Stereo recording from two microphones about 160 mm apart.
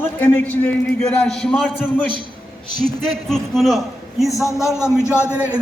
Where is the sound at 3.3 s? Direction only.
Centre (ahead or behind).